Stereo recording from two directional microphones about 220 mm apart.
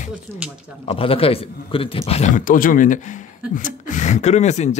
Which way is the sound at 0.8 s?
25° left (ahead or behind).